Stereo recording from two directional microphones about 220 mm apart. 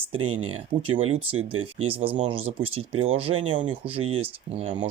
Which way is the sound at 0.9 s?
25° right (ahead or behind).